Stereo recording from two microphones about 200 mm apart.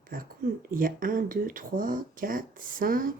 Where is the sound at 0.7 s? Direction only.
45° right (ahead or behind).